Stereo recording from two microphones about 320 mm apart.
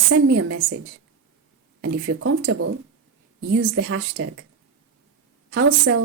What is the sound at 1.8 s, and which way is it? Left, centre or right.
Speech, right.